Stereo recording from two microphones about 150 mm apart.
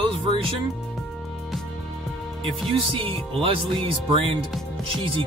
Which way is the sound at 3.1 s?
40° right (ahead or behind).